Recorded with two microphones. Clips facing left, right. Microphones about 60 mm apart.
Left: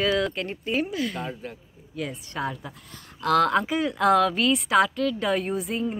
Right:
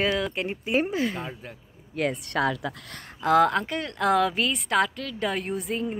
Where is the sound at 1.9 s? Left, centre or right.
Right.